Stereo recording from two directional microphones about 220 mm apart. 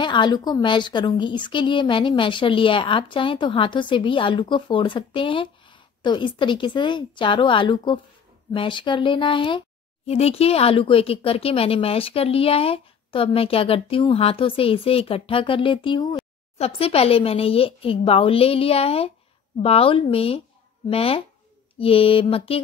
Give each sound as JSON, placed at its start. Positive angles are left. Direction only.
{"t": 0.0, "sound": "a woman's voice", "side_deg": 20}